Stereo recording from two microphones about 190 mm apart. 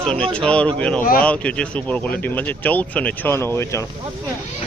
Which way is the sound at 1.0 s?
45° left (ahead or behind).